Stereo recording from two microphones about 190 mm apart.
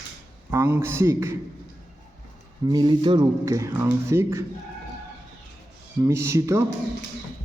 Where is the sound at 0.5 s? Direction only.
15° right (ahead or behind).